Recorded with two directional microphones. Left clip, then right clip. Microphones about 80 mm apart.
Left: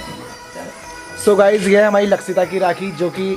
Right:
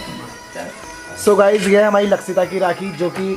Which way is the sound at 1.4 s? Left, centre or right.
Centre.